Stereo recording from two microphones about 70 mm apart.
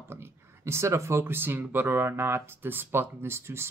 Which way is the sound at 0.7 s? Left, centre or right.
Right.